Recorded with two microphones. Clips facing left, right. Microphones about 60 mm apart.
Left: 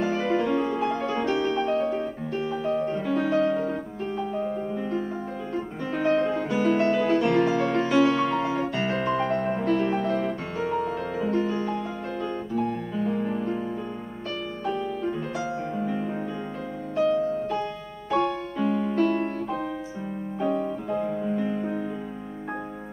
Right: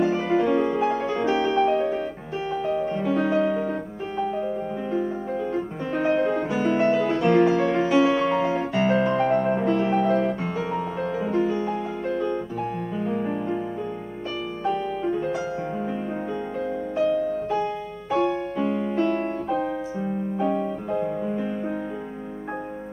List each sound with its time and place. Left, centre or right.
0.0 s music: centre
2.5 s music: centre
2.8 s music: centre
5.5 s music: centre
14.6 s music: centre
16.9 s music: centre
20.3 s music: centre